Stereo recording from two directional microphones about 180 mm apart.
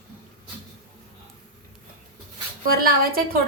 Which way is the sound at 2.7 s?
55° right (ahead or behind).